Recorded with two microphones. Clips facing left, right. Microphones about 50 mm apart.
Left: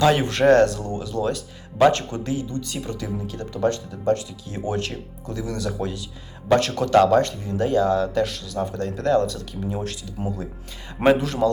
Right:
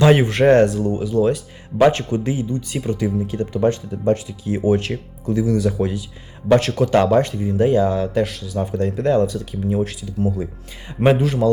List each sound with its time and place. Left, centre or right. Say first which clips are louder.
0.0 s speech: right 4 dB; right